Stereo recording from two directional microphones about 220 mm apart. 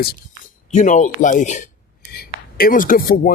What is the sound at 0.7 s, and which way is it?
Speech, 35° left (ahead or behind).